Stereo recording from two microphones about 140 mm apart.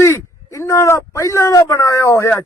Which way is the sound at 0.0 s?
20° left (ahead or behind).